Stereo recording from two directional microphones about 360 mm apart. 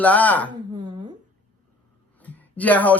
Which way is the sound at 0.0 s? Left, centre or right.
Centre.